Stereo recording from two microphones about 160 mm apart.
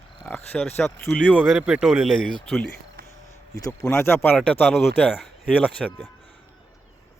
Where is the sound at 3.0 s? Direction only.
80° right.